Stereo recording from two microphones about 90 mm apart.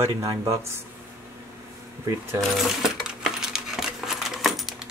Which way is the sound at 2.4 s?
5° right (ahead or behind).